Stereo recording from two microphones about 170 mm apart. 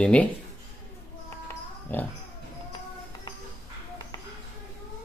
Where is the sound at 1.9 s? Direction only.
10° left (ahead or behind).